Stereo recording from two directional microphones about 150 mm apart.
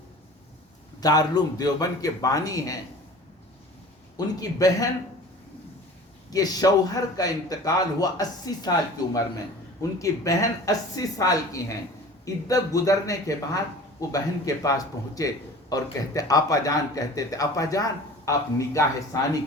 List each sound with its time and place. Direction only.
1.0 s a man's voice: 25° left (ahead or behind)
4.4 s a man's voice: 25° left (ahead or behind)
6.3 s a man's voice: 25° left (ahead or behind)
10.0 s a man's voice: 20° left (ahead or behind)